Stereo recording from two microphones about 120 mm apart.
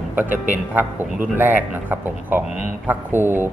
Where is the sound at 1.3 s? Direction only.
15° right (ahead or behind).